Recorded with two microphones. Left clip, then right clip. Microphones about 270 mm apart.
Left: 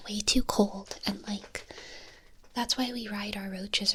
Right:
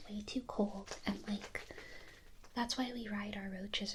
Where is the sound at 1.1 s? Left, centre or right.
Centre.